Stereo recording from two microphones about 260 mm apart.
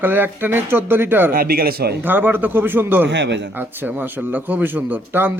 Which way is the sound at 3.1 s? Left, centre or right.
Right.